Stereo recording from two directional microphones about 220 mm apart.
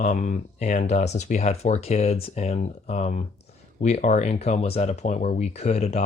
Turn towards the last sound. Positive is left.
turn(degrees=30)  # may be behind; listen again after turning